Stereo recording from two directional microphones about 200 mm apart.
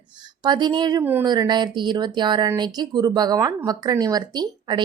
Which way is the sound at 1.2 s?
20° right (ahead or behind).